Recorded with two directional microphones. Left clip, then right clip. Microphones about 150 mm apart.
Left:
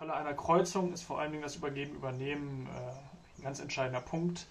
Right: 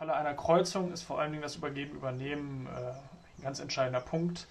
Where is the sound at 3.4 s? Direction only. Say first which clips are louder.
Right 3 dB; 45° right (ahead or behind).